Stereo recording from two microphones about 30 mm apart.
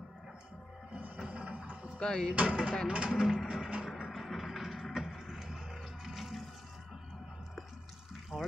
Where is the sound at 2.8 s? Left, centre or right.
Right.